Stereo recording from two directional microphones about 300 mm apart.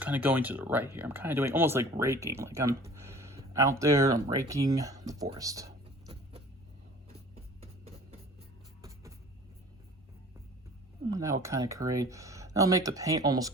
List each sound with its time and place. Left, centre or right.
0.0 s speech: centre
7.3 s a sound: centre
11.1 s speech: centre